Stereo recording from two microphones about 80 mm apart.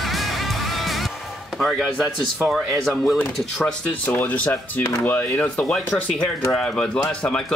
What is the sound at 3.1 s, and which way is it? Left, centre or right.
Speech, centre.